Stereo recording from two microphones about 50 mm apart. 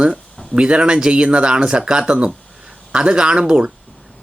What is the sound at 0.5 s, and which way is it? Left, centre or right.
Speech, centre.